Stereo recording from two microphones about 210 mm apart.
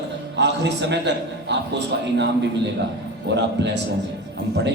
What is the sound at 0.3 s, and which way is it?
A man's voice, 55° right (ahead or behind).